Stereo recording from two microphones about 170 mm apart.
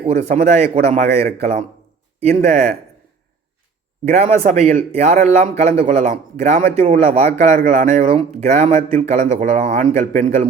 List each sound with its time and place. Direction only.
0.0 s speech: 40° right (ahead or behind)
2.3 s speech: 55° right (ahead or behind)
4.1 s speech: 45° right (ahead or behind)
7.0 s speech: 55° right (ahead or behind)
8.0 s speech: 35° right (ahead or behind)